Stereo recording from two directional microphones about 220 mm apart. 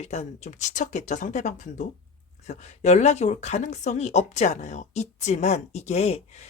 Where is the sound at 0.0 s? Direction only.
30° left (ahead or behind).